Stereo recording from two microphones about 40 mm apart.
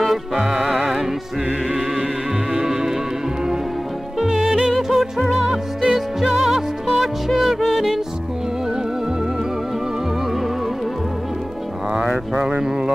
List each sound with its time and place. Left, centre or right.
0.0 s music: centre
2.5 s music: centre
4.2 s music: centre
5.5 s music: centre
5.9 s music: centre
12.4 s a sound: centre